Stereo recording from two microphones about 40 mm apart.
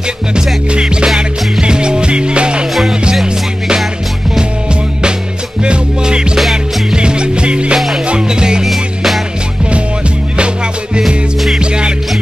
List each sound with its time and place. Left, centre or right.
0.7 s music: centre
5.6 s music: right
6.3 s music: centre
7.0 s music: right
8.6 s music: centre
11.6 s music: right